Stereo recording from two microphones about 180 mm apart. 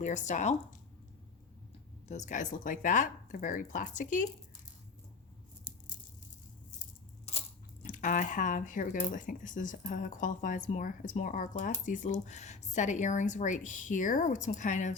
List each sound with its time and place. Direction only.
0.0 s speech: 40° left (ahead or behind)
2.0 s speech: 40° left (ahead or behind)
5.9 s a sound: 45° left (ahead or behind)
7.9 s speech: 45° left (ahead or behind)